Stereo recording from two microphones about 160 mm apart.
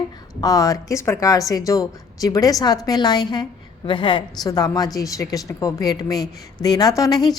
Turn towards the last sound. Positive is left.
turn(degrees=25)  # may be behind; listen again after turning